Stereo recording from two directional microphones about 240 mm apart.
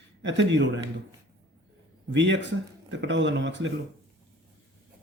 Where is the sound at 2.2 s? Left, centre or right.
Right.